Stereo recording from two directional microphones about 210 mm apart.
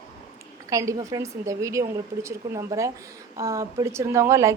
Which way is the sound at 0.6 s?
15° right (ahead or behind).